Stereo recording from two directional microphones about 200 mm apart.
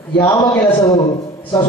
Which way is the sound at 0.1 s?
25° left (ahead or behind).